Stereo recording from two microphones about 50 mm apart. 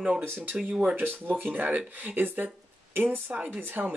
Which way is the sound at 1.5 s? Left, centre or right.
Right.